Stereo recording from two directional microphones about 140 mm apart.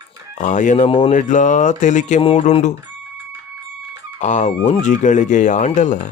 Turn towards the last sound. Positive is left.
turn(degrees=60)  # may be behind; listen again after turning